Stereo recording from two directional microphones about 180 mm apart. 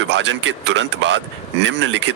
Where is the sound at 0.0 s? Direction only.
90° right.